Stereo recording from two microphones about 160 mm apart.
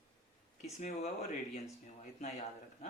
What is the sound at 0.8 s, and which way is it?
Speech, 50° left (ahead or behind).